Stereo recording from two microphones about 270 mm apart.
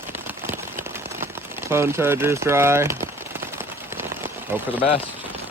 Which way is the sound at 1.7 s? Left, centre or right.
Centre.